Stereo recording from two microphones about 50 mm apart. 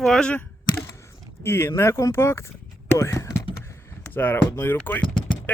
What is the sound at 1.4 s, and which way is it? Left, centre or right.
Speech, left.